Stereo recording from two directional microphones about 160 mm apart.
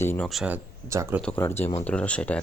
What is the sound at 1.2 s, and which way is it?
Speech, 10° left (ahead or behind).